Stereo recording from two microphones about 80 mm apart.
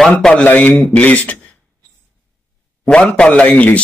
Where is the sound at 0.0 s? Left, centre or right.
Centre.